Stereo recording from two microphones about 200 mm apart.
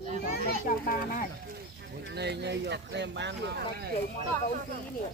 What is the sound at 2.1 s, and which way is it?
Speech, 60° right (ahead or behind).